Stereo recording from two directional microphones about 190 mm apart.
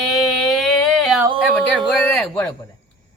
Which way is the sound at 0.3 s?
Centre (ahead or behind).